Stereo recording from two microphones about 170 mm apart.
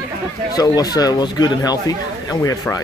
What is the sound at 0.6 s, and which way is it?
Speech, 20° left (ahead or behind).